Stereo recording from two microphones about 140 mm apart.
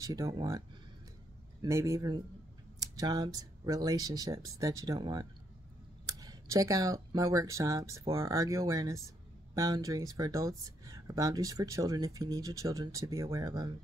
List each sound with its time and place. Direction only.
0.0 s speech: 25° right (ahead or behind)